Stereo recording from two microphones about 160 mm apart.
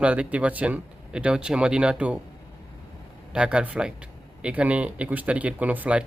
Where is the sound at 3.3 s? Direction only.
5° right (ahead or behind).